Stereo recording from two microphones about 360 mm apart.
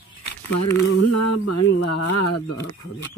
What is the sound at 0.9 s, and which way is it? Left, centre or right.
Speech, left.